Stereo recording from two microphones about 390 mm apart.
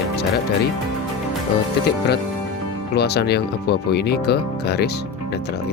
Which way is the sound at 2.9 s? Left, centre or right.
Left.